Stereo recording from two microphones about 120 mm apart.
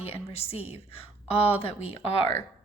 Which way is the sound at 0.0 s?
55° left (ahead or behind).